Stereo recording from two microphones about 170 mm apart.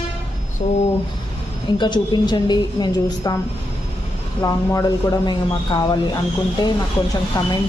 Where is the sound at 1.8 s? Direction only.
25° left (ahead or behind).